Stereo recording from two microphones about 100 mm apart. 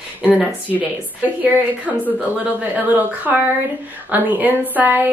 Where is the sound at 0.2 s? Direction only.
15° left (ahead or behind).